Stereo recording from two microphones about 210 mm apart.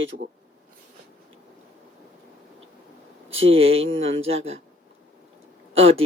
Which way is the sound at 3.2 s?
70° right (ahead or behind).